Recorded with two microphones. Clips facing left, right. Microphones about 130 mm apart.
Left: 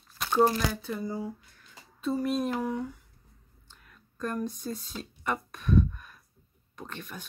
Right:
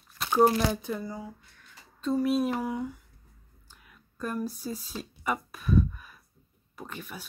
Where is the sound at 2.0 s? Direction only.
Centre (ahead or behind).